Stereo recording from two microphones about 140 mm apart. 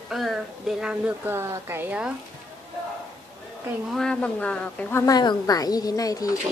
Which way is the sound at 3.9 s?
5° left (ahead or behind).